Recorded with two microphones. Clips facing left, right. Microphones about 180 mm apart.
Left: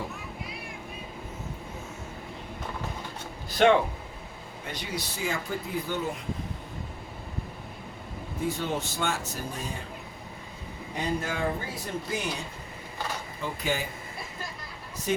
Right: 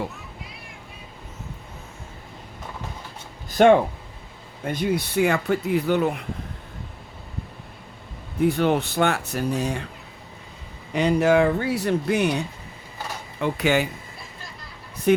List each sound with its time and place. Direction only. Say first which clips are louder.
3.6 s speech: right 6 dB; 50° right (ahead or behind); by 6.2 s 65° right (ahead or behind)
8.4 s speech: right 10 dB; 65° right (ahead or behind)
10.9 s speech: right 13 dB; 75° right (ahead or behind)
13.4 s speech: right 10 dB; 75° right (ahead or behind)
15.1 s speech: right 10 dB; 65° right (ahead or behind)